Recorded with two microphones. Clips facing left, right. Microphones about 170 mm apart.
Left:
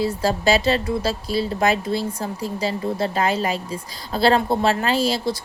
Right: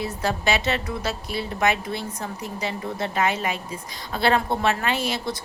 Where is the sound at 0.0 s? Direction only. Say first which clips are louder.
Left 5 dB; 35° left (ahead or behind).